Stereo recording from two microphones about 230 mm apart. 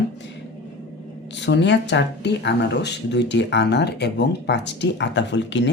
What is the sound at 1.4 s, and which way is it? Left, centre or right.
Speech, left.